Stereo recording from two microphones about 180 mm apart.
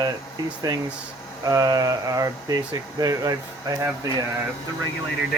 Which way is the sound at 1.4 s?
20° right (ahead or behind).